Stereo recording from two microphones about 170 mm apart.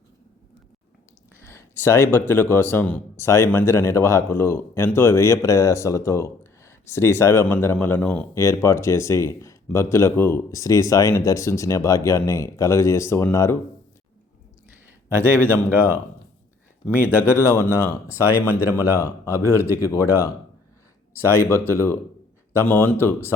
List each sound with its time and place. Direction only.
1.4 s speech: 15° left (ahead or behind)
14.7 s a sound: 15° right (ahead or behind)
16.9 s speech: 10° right (ahead or behind)
17.2 s speech: 15° left (ahead or behind)